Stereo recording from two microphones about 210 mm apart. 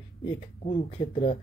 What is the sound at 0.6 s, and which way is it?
Speech, 30° left (ahead or behind).